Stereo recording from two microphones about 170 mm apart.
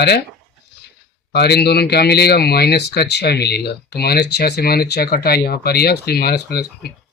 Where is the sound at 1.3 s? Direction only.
75° left (ahead or behind).